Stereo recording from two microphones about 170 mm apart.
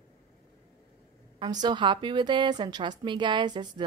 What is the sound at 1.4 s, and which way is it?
A woman's voice, 25° right (ahead or behind).